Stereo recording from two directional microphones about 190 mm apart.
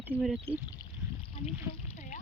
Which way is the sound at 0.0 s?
5° right (ahead or behind).